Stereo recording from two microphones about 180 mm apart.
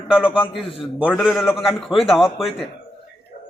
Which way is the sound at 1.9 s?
35° left (ahead or behind).